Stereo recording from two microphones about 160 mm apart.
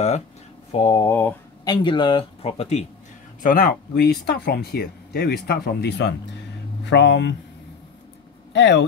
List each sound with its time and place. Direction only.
0.7 s speech: 35° left (ahead or behind)
0.9 s speech: 15° left (ahead or behind)
1.6 s speech: 25° left (ahead or behind)
3.4 s speech: 65° left (ahead or behind); by 7.3 s 90° left
8.5 s speech: 90° left